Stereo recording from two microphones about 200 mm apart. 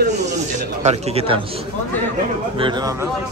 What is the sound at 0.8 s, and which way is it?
Speech, 35° right (ahead or behind).